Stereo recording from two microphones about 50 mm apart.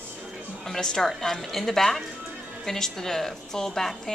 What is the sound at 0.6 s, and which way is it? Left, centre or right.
A woman's voice, centre.